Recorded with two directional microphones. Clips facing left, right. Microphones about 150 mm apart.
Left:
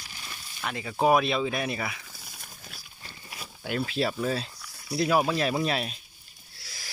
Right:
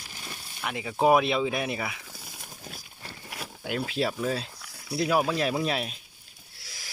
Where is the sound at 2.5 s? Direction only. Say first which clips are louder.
Right 9 dB; 35° right (ahead or behind).